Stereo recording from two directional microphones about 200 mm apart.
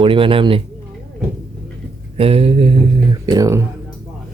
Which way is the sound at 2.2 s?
30° right (ahead or behind).